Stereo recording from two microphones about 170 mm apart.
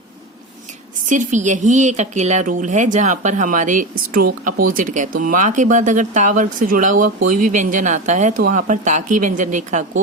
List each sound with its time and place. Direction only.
1.0 s a woman's voice: 45° right (ahead or behind)